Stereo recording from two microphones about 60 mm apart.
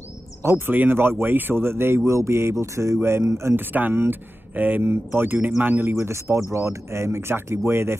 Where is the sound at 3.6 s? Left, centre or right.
Right.